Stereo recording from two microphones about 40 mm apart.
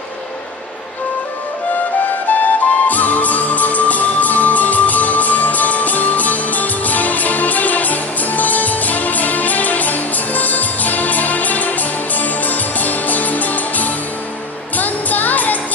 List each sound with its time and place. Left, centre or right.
2.2 s music: left